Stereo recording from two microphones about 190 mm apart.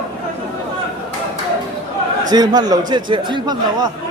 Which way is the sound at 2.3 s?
20° right (ahead or behind).